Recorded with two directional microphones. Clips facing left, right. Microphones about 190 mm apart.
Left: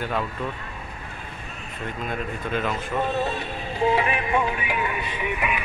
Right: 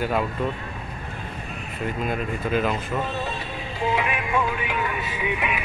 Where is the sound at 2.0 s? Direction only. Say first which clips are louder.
Right 1 dB; 5° right (ahead or behind).